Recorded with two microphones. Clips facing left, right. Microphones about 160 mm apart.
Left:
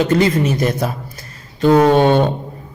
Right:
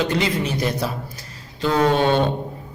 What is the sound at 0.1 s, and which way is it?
A man's voice, 50° left (ahead or behind).